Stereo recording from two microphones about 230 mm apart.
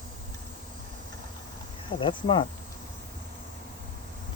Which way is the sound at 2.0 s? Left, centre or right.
Left.